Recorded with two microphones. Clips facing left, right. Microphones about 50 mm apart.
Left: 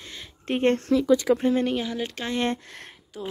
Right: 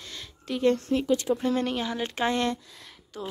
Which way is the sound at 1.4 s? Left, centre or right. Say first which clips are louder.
Left 4 dB; centre.